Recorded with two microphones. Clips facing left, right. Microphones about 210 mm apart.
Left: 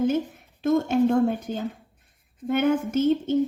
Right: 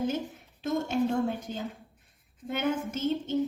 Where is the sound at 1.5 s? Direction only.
55° left (ahead or behind).